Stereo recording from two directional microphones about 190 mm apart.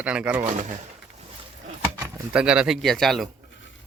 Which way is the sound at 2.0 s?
5° right (ahead or behind).